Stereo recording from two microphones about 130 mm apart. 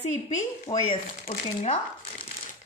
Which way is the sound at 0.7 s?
55° left (ahead or behind).